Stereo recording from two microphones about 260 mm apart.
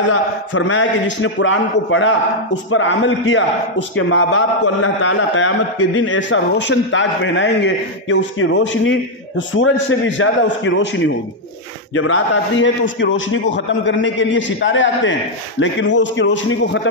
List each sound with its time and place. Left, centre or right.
0.1 s a man's voice: left